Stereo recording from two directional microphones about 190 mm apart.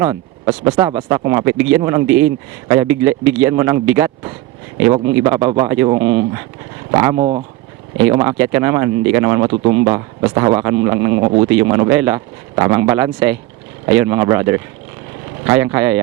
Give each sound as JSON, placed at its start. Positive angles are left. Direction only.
{"t": 0.0, "sound": "speech", "side_deg": -20}
{"t": 11.2, "sound": "speech", "side_deg": -30}
{"t": 11.4, "sound": "speech", "side_deg": -15}